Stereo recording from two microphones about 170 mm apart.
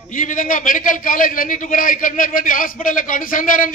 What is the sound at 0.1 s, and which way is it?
A man's voice, 50° left (ahead or behind).